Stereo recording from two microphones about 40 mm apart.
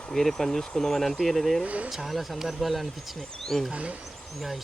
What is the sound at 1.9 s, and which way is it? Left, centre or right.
Speech, centre.